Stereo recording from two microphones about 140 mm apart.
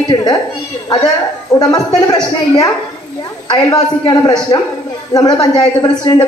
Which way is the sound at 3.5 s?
30° left (ahead or behind).